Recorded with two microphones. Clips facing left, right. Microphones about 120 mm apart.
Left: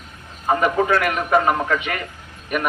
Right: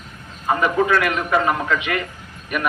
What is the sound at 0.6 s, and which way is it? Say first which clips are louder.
A man's voice: right 1 dB; 40° left (ahead or behind).